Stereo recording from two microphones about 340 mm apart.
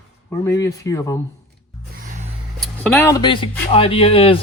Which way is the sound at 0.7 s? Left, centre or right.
Centre.